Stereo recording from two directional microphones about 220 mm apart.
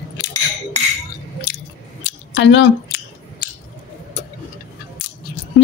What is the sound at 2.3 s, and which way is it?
Speech, 60° left (ahead or behind).